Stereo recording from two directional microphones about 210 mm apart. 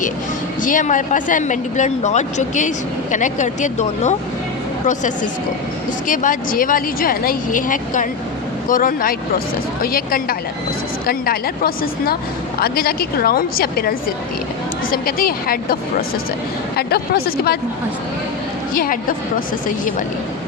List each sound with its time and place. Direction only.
0.6 s a woman's voice: 40° left (ahead or behind)
18.8 s a woman's voice: 40° left (ahead or behind)